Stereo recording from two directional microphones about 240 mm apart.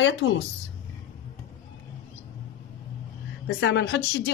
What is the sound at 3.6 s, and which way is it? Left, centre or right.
Speech, left.